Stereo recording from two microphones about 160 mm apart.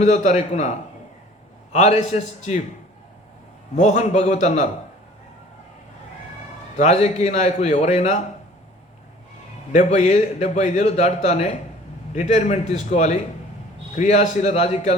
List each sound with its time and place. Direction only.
0.0 s a man's voice: 50° left (ahead or behind)
1.7 s a man's voice: 45° left (ahead or behind)
3.8 s a man's voice: 45° left (ahead or behind)
6.7 s a man's voice: 45° left (ahead or behind)
9.7 s a man's voice: 45° left (ahead or behind)